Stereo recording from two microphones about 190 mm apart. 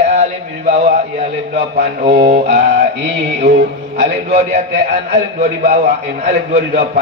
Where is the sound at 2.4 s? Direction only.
55° right (ahead or behind).